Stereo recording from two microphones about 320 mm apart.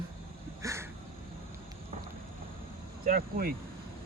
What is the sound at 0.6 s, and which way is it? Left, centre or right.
Crow, centre.